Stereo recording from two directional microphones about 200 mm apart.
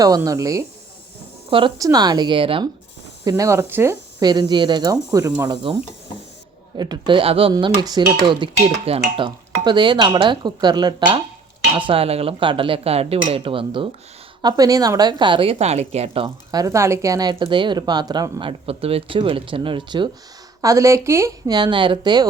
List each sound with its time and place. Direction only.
0.0 s a woman's voice: 15° right (ahead or behind)
6.7 s a woman's voice: 20° right (ahead or behind)